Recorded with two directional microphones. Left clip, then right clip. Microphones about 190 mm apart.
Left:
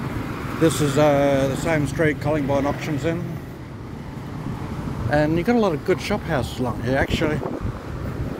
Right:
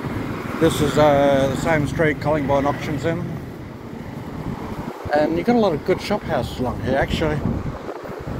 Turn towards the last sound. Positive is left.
turn(degrees=50)  # may be behind; listen again after turning